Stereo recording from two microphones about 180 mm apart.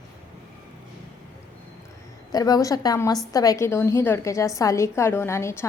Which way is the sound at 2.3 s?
20° left (ahead or behind).